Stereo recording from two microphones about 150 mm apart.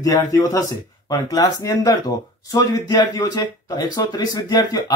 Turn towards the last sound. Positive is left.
turn(degrees=25)  # may be behind; listen again after turning